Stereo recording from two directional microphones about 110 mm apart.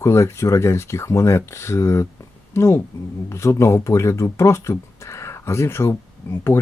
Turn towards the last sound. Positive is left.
turn(degrees=25)  # may be behind; listen again after turning